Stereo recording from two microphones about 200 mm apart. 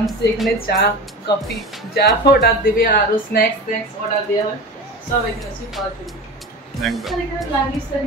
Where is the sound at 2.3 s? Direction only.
50° left (ahead or behind).